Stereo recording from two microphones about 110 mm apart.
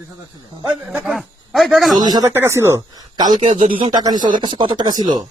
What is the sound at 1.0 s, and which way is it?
Speech, centre (ahead or behind).